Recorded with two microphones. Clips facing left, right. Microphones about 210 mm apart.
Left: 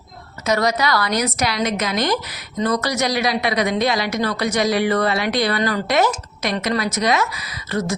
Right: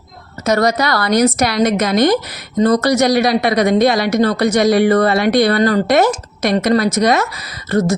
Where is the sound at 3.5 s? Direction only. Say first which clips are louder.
Right 7 dB; 50° right (ahead or behind).